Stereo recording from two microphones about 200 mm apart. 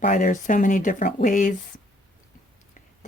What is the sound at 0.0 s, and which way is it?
Speech, 40° left (ahead or behind).